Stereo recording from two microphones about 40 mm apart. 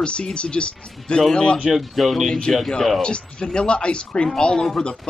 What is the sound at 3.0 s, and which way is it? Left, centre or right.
Speech, left.